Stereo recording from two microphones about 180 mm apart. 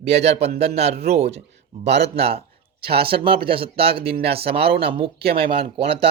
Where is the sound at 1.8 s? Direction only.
70° right (ahead or behind).